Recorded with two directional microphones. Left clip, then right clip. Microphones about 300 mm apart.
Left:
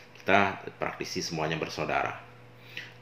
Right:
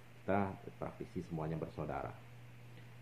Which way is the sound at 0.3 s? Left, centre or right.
Centre.